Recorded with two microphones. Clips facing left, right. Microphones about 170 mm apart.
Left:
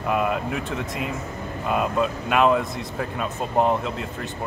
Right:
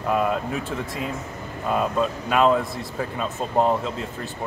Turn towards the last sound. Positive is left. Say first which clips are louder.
# even
turn(degrees=5)  # may be behind; listen again after turning